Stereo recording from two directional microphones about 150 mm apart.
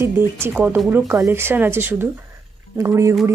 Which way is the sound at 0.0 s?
15° right (ahead or behind).